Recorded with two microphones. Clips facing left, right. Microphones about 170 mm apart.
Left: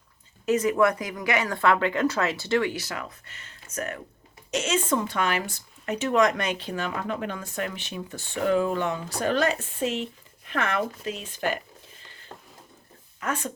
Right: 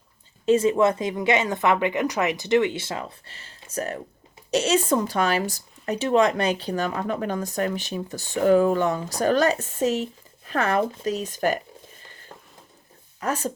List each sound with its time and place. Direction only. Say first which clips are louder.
0.4 s speech: right 3 dB; 30° right (ahead or behind)
13.1 s speech: right 4 dB; 35° right (ahead or behind)